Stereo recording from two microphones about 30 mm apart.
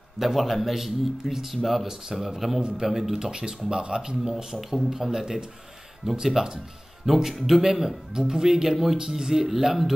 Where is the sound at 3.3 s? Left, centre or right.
Right.